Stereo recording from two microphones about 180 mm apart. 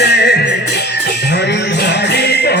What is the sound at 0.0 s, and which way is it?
Music, 65° left (ahead or behind).